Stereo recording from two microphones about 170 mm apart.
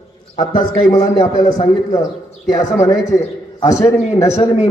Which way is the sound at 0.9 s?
20° left (ahead or behind).